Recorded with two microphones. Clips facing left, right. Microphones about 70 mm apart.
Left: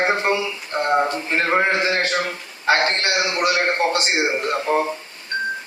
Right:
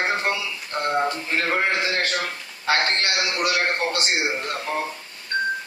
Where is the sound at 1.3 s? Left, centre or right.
Left.